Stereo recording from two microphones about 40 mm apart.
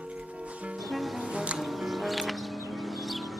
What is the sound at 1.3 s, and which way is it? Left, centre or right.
Music, right.